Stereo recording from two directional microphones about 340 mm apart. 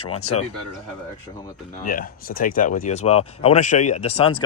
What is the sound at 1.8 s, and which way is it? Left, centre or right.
Speech, left.